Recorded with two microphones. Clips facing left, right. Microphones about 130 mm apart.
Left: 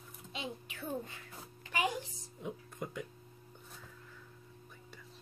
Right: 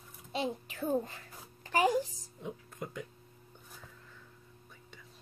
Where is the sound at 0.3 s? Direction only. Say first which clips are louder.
Right 8 dB; 40° right (ahead or behind).